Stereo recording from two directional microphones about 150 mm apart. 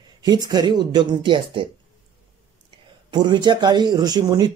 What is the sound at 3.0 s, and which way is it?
Speech, 30° right (ahead or behind).